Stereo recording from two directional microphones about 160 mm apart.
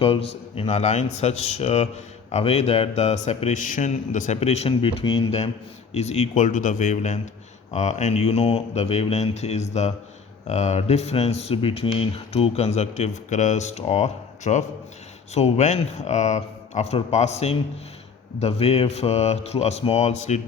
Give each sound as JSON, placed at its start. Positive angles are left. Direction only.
{"t": 0.0, "sound": "a man's voice", "side_deg": 35}